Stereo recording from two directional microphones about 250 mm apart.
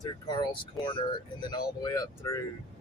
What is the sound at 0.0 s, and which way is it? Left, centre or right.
Speech, centre.